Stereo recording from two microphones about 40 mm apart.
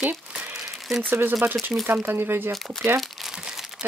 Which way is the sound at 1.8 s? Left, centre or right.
Right.